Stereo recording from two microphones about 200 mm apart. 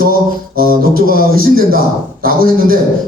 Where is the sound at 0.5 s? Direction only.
45° right (ahead or behind).